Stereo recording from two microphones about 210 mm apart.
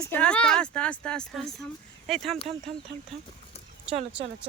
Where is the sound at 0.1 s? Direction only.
5° left (ahead or behind).